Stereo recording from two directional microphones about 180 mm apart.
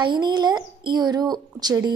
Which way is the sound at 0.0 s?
25° right (ahead or behind).